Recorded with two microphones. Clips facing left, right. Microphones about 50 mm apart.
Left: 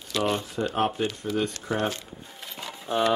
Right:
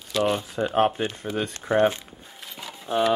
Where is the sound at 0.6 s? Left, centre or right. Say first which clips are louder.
Right 5 dB; centre.